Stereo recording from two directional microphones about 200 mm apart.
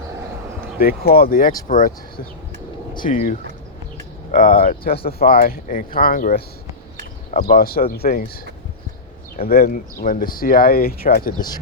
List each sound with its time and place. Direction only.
0.8 s speech: 50° left (ahead or behind)
9.4 s speech: 50° left (ahead or behind)
11.3 s speech: 20° left (ahead or behind)